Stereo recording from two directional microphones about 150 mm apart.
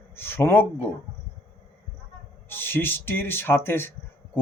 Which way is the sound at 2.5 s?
15° left (ahead or behind).